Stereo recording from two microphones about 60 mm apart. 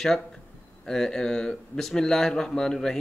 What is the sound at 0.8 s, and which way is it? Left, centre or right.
Speech, centre.